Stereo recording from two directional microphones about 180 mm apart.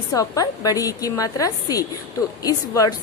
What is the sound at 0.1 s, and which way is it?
A woman's voice, 20° left (ahead or behind).